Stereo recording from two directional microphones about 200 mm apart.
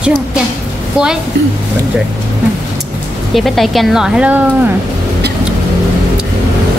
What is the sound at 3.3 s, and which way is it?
A woman's voice, centre (ahead or behind).